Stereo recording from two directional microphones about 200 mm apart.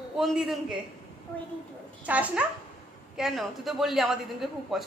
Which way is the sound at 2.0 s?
5° right (ahead or behind).